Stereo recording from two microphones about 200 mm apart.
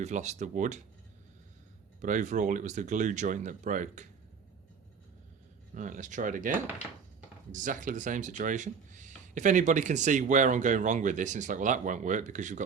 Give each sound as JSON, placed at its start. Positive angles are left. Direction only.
{"t": 0.0, "sound": "speech", "side_deg": -35}
{"t": 2.0, "sound": "speech", "side_deg": -40}
{"t": 5.7, "sound": "speech", "side_deg": -40}